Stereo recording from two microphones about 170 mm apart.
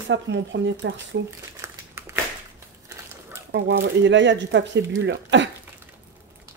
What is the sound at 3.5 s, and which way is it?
Speech, 90° right.